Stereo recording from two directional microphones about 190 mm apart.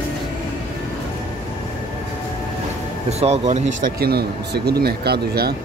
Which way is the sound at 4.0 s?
55° right (ahead or behind).